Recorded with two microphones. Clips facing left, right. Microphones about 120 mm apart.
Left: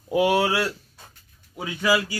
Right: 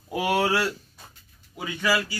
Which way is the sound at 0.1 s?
15° left (ahead or behind).